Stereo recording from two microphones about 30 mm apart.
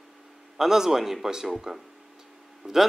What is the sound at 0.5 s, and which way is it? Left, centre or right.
Speech, centre.